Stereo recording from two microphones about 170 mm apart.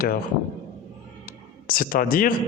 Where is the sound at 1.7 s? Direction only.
55° left (ahead or behind).